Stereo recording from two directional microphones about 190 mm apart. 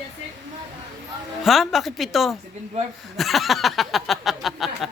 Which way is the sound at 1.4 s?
Centre (ahead or behind).